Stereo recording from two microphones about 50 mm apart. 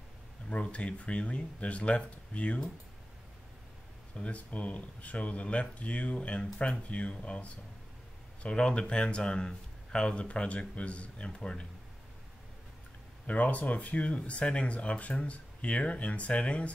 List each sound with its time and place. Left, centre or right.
0.5 s speech: left
4.1 s speech: left
13.3 s speech: left